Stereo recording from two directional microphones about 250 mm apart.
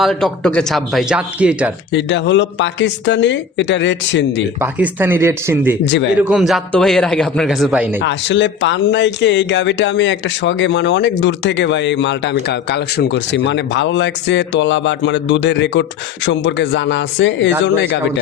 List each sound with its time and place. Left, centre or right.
0.0 s a man's voice: centre
1.9 s speech: left
4.6 s speech: centre
5.8 s speech: left
6.2 s a man's voice: centre
8.0 s speech: left